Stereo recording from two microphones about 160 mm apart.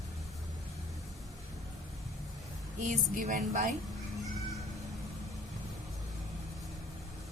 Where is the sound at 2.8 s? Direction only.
55° right (ahead or behind).